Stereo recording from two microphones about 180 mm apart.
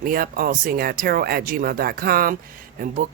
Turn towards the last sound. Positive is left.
turn(degrees=-50)  # may be behind; listen again after turning